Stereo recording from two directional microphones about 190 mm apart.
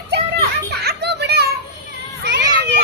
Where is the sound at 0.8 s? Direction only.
60° right (ahead or behind).